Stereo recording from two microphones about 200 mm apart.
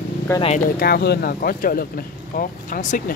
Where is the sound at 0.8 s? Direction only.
55° left (ahead or behind).